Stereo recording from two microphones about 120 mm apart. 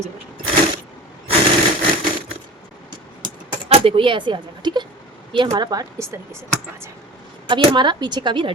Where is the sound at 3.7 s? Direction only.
50° right (ahead or behind); by 6.2 s 30° right (ahead or behind).